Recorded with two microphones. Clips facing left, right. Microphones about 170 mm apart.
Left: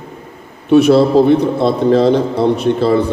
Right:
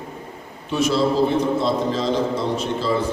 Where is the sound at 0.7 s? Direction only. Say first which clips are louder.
Left 11 dB; 60° left (ahead or behind).